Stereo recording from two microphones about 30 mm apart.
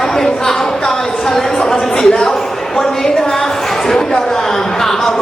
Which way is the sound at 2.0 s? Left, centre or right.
Left.